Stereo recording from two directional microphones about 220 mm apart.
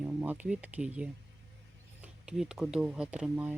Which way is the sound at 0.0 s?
5° right (ahead or behind).